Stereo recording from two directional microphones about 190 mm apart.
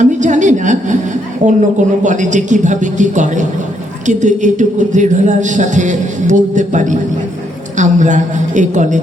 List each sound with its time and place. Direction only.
0.0 s a woman's voice: 40° right (ahead or behind)